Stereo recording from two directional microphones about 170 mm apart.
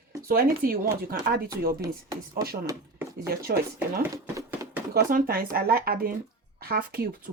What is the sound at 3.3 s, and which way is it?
Speech, 65° right (ahead or behind).